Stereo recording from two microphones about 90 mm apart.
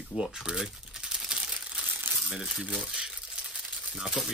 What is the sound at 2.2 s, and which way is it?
Speech, 5° right (ahead or behind).